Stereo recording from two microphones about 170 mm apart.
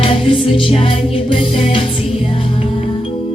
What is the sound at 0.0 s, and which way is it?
Music, 30° left (ahead or behind).